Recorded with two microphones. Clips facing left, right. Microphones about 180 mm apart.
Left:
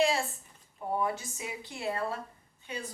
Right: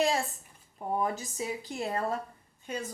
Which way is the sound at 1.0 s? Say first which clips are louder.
Right 2 dB; 40° right (ahead or behind).